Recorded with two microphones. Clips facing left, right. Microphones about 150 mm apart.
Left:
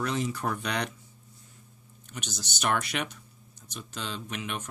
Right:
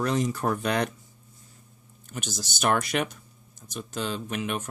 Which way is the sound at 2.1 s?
45° right (ahead or behind).